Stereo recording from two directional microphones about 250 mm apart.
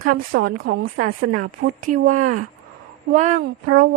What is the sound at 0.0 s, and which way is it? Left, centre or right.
A woman's voice, right.